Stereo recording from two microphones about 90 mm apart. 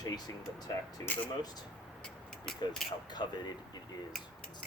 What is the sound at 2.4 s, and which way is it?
Mechanisms, 5° left (ahead or behind).